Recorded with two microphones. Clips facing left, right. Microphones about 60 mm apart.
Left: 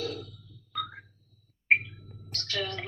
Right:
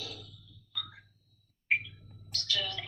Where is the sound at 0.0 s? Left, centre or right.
Left.